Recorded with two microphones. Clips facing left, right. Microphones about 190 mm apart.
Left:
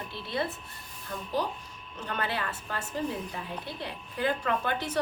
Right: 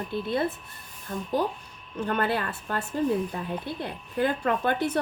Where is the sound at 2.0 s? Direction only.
50° right (ahead or behind).